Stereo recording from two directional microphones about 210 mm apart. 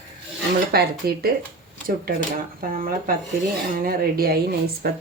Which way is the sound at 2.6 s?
40° right (ahead or behind).